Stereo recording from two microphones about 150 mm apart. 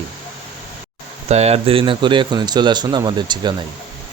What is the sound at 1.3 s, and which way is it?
Speech, 45° right (ahead or behind).